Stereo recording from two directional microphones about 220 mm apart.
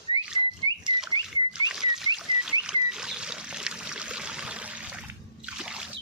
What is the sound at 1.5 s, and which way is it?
Pig, centre (ahead or behind).